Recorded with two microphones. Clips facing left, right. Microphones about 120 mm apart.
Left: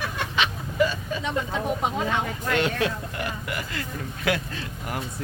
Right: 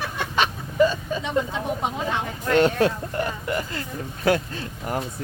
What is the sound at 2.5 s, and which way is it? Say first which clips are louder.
Speech: right 6 dB; 40° right (ahead or behind).